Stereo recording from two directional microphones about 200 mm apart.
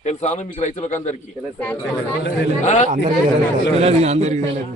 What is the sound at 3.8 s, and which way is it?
Speech, 30° right (ahead or behind).